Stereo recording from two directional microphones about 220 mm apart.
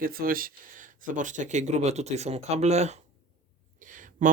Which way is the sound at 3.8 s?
35° right (ahead or behind).